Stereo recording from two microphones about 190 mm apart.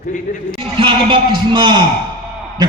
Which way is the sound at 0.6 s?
25° right (ahead or behind).